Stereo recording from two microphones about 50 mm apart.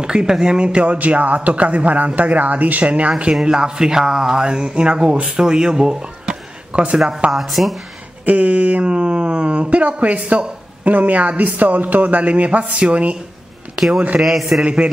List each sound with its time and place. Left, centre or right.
0.0 s a man's voice: centre
7.3 s speech: centre
8.3 s a man's voice: right
14.2 s speech: centre
14.6 s a man's voice: right